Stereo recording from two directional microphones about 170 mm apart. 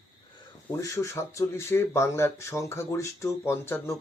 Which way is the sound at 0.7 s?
15° left (ahead or behind).